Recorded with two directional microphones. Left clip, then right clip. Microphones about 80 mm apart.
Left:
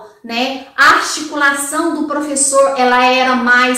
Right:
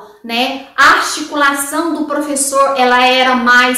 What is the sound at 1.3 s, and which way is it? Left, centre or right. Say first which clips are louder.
A woman's voice: right 1 dB; right.